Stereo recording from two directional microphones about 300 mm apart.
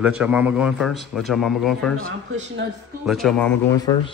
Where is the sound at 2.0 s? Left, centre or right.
Right.